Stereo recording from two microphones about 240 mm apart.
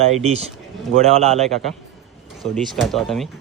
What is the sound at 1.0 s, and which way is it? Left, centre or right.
Speech, right.